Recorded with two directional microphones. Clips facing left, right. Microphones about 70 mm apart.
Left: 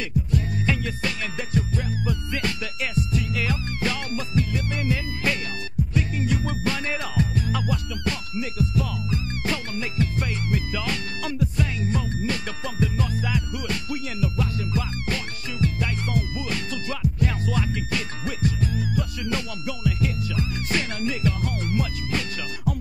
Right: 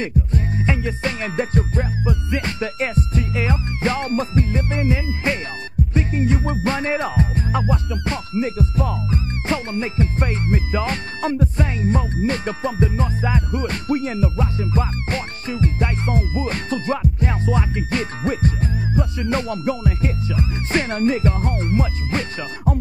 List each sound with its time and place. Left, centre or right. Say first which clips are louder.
0.0 s music: right 3 dB; right
2.0 s music: right 4 dB; right